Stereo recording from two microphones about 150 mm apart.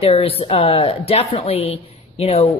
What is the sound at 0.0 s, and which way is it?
A woman's voice, 40° left (ahead or behind).